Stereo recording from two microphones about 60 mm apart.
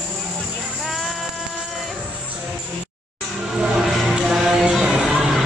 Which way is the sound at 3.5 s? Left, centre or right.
Centre.